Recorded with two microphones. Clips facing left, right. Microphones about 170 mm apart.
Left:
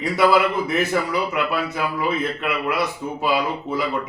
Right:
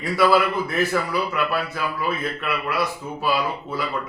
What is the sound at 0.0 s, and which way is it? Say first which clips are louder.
A man's voice: left 1 dB; 20° left (ahead or behind).